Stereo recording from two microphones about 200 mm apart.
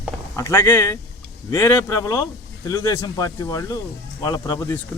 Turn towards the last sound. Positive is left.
turn(degrees=15)  # may be behind; listen again after turning